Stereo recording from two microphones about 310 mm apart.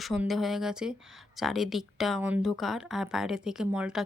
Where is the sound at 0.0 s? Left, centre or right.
Centre.